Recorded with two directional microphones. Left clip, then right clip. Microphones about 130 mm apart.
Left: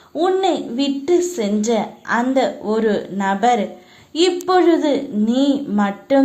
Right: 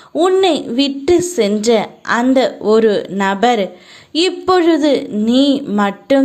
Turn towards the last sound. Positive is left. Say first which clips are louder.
# right 3 dB
turn(degrees=-35)  # may be behind; listen again after turning